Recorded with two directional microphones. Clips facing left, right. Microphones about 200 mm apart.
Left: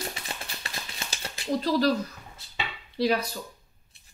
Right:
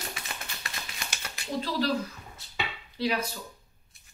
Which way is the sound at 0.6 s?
30° left (ahead or behind).